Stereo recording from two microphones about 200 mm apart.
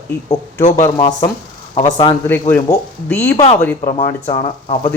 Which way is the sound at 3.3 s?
30° left (ahead or behind).